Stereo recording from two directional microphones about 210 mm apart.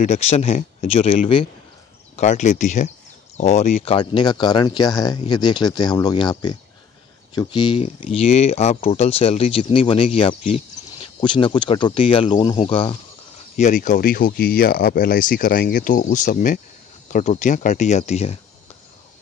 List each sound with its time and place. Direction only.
0.0 s speech: 30° left (ahead or behind)
13.6 s speech: 35° left (ahead or behind)